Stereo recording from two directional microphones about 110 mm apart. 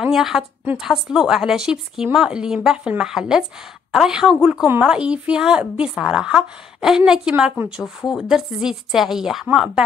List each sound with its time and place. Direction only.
0.0 s a woman's voice: 5° right (ahead or behind)